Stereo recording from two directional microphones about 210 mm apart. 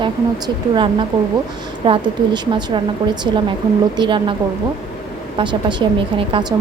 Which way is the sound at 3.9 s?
20° right (ahead or behind).